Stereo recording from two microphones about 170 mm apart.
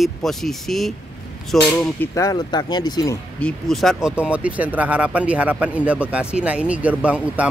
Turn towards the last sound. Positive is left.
turn(degrees=-5)  # may be behind; listen again after turning